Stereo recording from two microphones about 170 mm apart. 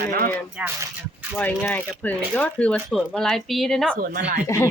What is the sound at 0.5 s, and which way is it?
Speech, 15° right (ahead or behind).